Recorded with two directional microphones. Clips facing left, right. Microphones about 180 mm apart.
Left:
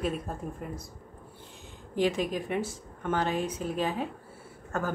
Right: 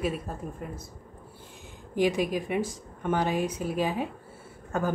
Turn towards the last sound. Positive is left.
turn(degrees=-15)  # may be behind; listen again after turning